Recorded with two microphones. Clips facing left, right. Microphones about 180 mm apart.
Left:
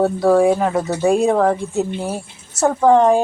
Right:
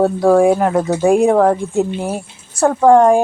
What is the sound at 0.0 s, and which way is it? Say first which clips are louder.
Speech: right 2 dB; 15° right (ahead or behind).